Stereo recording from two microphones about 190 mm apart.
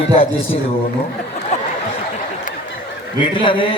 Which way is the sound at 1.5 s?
40° left (ahead or behind).